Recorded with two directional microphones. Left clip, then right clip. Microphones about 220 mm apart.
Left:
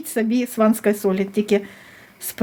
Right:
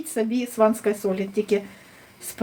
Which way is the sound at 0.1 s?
45° left (ahead or behind).